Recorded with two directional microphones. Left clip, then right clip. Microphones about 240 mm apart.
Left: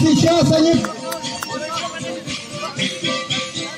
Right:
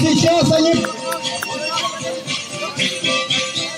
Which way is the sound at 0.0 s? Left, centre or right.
Left.